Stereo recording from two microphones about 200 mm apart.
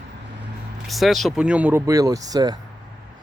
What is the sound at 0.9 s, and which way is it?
Speech, centre (ahead or behind).